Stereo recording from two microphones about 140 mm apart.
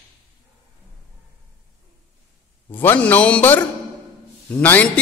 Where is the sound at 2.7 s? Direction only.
15° left (ahead or behind).